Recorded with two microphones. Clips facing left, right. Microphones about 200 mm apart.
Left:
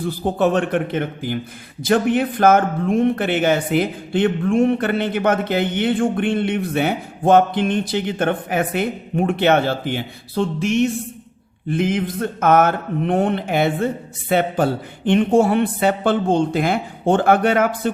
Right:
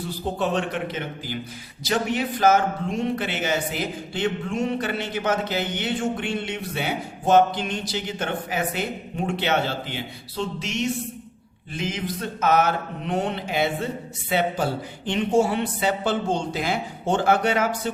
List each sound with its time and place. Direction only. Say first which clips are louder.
0.0 s speech: left 7 dB; 55° left (ahead or behind)